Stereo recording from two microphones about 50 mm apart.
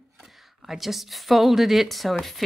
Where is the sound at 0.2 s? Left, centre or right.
Centre.